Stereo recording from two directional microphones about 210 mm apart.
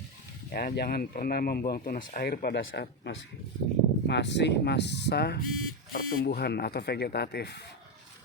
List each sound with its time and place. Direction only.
0.5 s speech: 45° left (ahead or behind)
5.5 s speech: 90° left
5.9 s speech: 45° left (ahead or behind)